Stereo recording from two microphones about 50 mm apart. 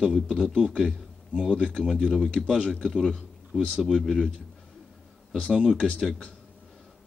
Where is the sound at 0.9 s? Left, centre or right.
Centre.